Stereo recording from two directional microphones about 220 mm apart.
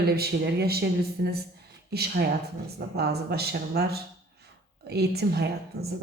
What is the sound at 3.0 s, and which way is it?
Speech, 45° right (ahead or behind).